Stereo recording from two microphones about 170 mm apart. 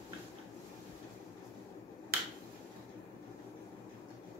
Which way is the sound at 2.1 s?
65° right (ahead or behind).